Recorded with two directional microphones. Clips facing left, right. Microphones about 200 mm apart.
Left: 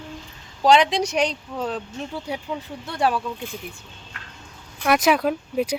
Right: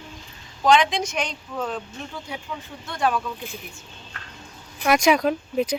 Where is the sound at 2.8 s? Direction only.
35° left (ahead or behind).